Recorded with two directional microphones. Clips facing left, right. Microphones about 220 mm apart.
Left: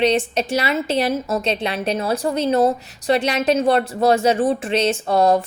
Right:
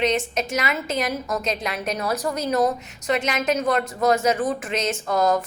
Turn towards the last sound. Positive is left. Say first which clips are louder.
# left 4 dB
turn(degrees=30)  # may be behind; listen again after turning